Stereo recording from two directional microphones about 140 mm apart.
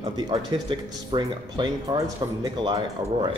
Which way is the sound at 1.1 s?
30° right (ahead or behind).